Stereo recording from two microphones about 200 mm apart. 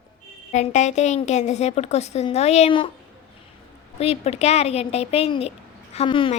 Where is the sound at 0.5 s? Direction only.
35° left (ahead or behind).